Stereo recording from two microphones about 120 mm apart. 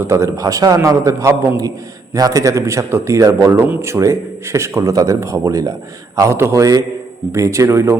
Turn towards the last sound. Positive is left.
turn(degrees=-25)  # may be behind; listen again after turning